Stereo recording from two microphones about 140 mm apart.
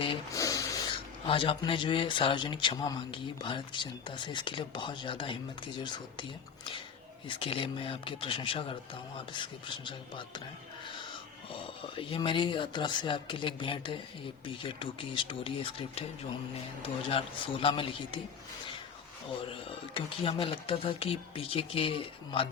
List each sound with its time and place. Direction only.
0.3 s a sound: 25° left (ahead or behind)
1.3 s speech: 40° left (ahead or behind)
7.3 s speech: 40° left (ahead or behind)
11.5 s speech: 40° left (ahead or behind)
17.1 s speech: 40° left (ahead or behind)
19.9 s speech: 40° left (ahead or behind)